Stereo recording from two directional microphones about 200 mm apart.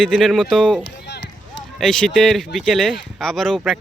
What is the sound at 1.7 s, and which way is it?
Speech, centre (ahead or behind).